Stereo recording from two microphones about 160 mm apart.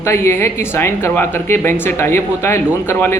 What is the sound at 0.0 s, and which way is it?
Speech, 15° left (ahead or behind).